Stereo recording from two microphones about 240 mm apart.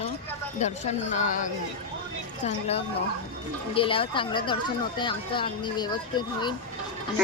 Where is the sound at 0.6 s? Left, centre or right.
Left.